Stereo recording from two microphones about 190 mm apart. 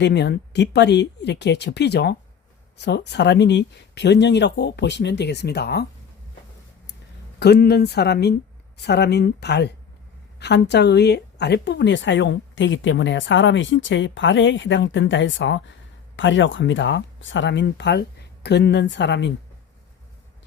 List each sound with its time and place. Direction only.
0.0 s speech: 60° left (ahead or behind)
7.3 s a woman's voice: 60° left (ahead or behind)